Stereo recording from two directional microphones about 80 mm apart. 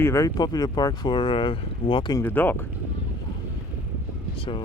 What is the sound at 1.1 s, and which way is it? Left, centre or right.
Speech, left.